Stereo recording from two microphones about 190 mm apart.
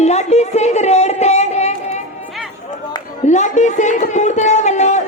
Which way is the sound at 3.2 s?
40° left (ahead or behind).